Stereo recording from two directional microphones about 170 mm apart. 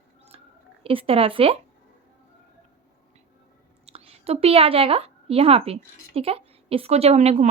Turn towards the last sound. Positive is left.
turn(degrees=-40)  # may be behind; listen again after turning